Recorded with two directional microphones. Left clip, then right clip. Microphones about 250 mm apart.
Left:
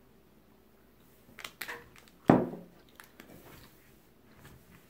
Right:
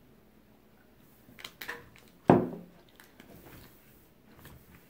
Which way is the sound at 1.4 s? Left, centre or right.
Left.